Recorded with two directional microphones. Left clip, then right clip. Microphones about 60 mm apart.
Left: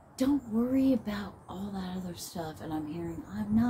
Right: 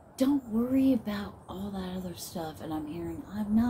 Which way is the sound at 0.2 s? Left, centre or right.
Centre.